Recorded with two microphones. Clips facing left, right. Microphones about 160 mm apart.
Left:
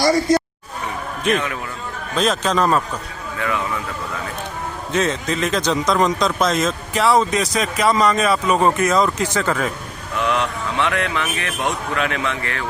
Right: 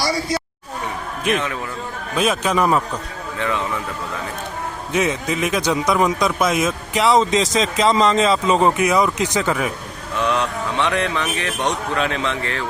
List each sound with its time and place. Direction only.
0.0 s a sound: 50° left (ahead or behind)
2.1 s speech: 10° right (ahead or behind)
3.3 s speech: 25° right (ahead or behind)
4.9 s speech: 10° right (ahead or behind)
10.8 s speech: 20° right (ahead or behind)